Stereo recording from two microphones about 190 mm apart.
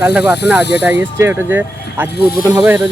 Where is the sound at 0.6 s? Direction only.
60° left (ahead or behind).